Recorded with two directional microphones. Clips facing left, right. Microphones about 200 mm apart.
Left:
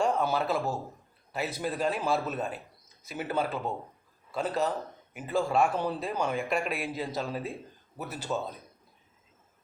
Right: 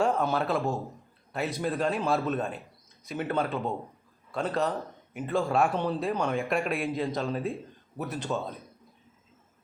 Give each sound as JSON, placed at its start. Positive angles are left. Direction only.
{"t": 0.0, "sound": "a man's voice", "side_deg": 0}